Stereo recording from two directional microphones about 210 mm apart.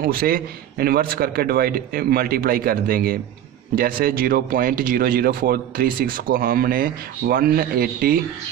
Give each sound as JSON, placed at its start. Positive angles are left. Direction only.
{"t": 0.0, "sound": "speech", "side_deg": -45}